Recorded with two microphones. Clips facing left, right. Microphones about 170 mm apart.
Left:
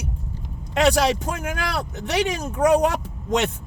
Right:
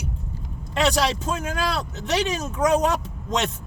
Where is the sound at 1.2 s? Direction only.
65° left (ahead or behind).